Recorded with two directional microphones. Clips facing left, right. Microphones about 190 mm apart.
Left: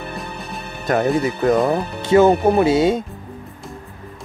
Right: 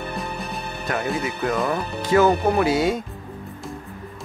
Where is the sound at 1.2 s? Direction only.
35° left (ahead or behind).